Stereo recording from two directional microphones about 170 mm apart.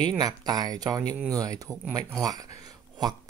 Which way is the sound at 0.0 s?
20° right (ahead or behind).